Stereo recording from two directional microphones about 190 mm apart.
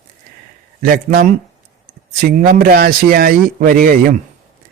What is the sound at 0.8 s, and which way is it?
Speech, 50° right (ahead or behind).